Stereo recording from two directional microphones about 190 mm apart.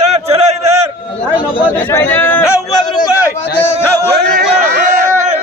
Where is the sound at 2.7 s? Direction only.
20° left (ahead or behind).